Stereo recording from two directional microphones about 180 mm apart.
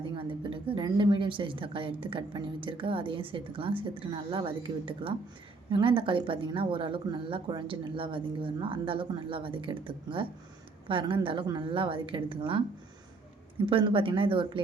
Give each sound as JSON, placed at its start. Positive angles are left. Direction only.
{"t": 0.2, "sound": "speech", "side_deg": -30}
{"t": 13.7, "sound": "speech", "side_deg": -30}